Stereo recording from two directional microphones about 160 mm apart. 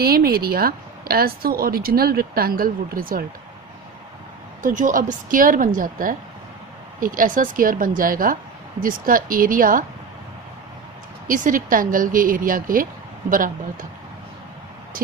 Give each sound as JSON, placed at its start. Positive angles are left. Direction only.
{"t": 0.0, "sound": "speech", "side_deg": -75}
{"t": 4.6, "sound": "speech", "side_deg": -55}
{"t": 11.3, "sound": "speech", "side_deg": -55}
{"t": 14.9, "sound": "speech", "side_deg": -60}